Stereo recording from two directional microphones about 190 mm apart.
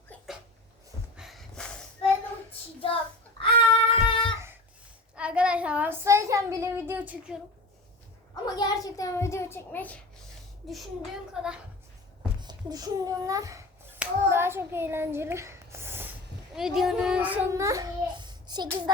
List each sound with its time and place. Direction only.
1.1 s snort: centre (ahead or behind)
2.5 s child singing: 30° left (ahead or behind)
5.1 s a sound: 5° right (ahead or behind)
8.5 s a child's voice: 20° left (ahead or behind)
11.4 s a woman's voice: 5° right (ahead or behind)
12.4 s a sound: 20° right (ahead or behind)
14.0 s hands: 10° right (ahead or behind)
16.6 s a child's voice: centre (ahead or behind); by 18.9 s 20° right (ahead or behind)